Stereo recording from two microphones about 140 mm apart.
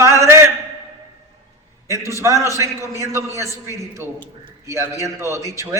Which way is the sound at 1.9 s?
20° right (ahead or behind).